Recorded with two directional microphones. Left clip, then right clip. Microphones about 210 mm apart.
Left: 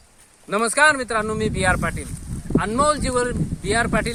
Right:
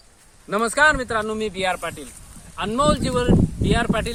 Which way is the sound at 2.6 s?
5° left (ahead or behind).